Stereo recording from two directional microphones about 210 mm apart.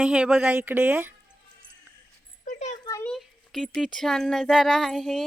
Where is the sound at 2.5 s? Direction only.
35° left (ahead or behind).